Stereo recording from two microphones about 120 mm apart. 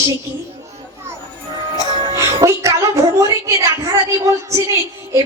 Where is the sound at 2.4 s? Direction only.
25° right (ahead or behind).